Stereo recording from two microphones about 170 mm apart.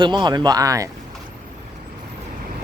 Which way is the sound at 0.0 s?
25° right (ahead or behind).